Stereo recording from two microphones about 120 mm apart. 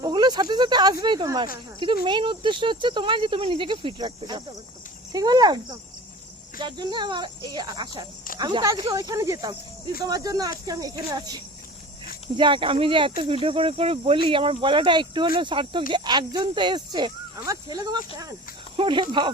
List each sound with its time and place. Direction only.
0.0 s speech: 35° right (ahead or behind)
6.6 s speech: 40° right (ahead or behind)